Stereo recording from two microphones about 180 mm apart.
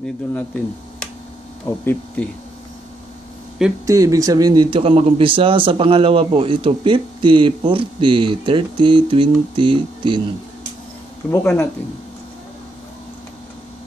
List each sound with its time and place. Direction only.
0.0 s speech: 10° left (ahead or behind)
1.7 s speech: 15° left (ahead or behind)
3.8 s speech: 20° right (ahead or behind)
11.2 s speech: 10° left (ahead or behind)